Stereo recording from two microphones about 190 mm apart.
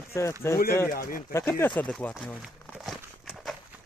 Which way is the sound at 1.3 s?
15° left (ahead or behind).